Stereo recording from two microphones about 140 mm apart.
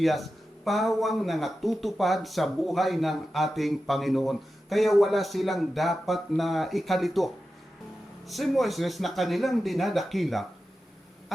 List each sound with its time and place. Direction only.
0.0 s speech: centre (ahead or behind)
8.3 s speech: centre (ahead or behind)